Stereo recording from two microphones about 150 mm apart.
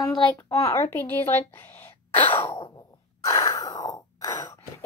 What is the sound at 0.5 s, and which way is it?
Speech, 40° left (ahead or behind).